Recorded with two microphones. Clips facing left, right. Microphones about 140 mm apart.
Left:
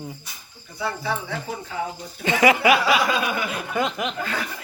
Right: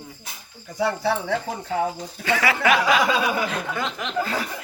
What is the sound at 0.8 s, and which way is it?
Speech, 80° right.